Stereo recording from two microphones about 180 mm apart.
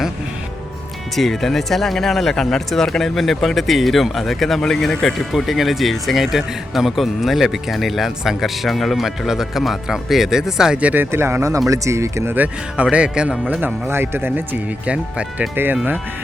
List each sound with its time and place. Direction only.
1.1 s speech: centre (ahead or behind)